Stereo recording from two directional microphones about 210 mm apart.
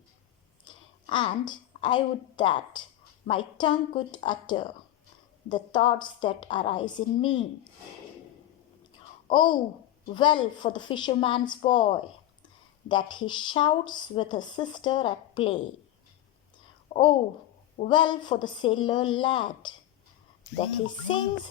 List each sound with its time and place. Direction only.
0.7 s a sound: 20° left (ahead or behind)
1.1 s speech: 20° left (ahead or behind)
9.3 s speech: 20° left (ahead or behind)
16.9 s speech: 25° left (ahead or behind)